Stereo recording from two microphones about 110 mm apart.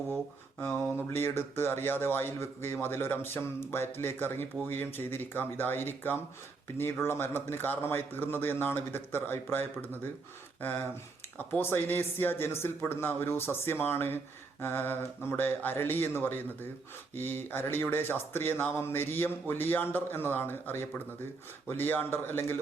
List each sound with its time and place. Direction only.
0.6 s speech: 20° left (ahead or behind)